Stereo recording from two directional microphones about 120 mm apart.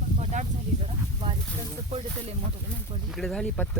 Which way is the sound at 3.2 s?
5° left (ahead or behind).